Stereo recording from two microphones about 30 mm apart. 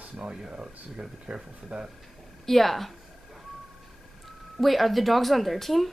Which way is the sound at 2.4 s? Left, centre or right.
Centre.